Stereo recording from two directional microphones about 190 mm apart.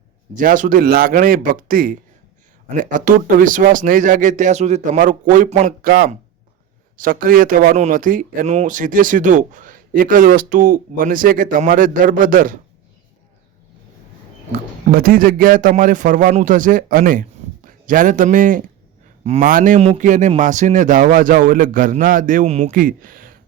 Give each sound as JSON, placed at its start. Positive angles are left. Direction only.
{"t": 0.3, "sound": "speech", "side_deg": -45}
{"t": 14.9, "sound": "a man's voice", "side_deg": -50}
{"t": 19.5, "sound": "speech", "side_deg": -45}